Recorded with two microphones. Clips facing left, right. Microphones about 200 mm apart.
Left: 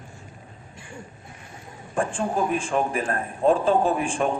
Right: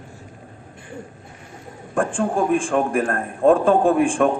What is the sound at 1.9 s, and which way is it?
A man's voice, 55° right (ahead or behind).